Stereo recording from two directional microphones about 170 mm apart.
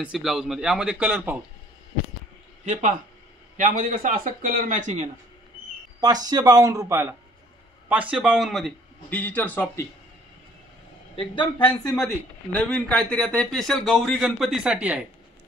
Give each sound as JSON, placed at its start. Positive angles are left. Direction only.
{"t": 0.0, "sound": "speech", "side_deg": -5}
{"t": 2.6, "sound": "a man's voice", "side_deg": -45}
{"t": 5.9, "sound": "speech", "side_deg": -25}
{"t": 11.1, "sound": "speech", "side_deg": 25}
{"t": 12.5, "sound": "speech", "side_deg": 10}